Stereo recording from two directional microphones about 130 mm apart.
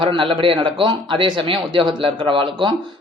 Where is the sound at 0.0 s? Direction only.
40° right (ahead or behind).